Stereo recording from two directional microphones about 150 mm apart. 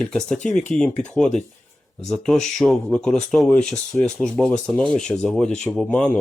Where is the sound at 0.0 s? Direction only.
5° left (ahead or behind).